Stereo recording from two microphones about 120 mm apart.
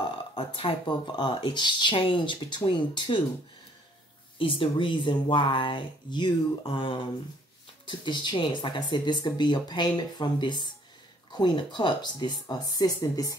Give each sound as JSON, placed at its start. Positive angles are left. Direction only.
{"t": 0.0, "sound": "speech", "side_deg": 45}
{"t": 4.4, "sound": "speech", "side_deg": 45}